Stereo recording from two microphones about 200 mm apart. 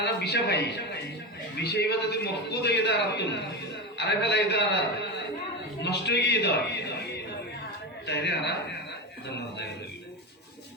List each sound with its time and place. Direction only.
0.0 s a man's voice: 55° left (ahead or behind)
5.8 s a man's voice: 55° left (ahead or behind)
8.0 s a man's voice: 60° left (ahead or behind)